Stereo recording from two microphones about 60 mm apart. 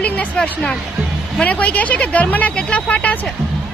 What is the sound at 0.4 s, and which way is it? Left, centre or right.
Speech, left.